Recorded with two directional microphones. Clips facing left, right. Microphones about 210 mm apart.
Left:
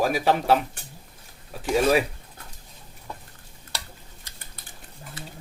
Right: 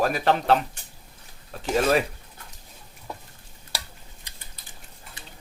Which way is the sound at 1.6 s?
10° left (ahead or behind).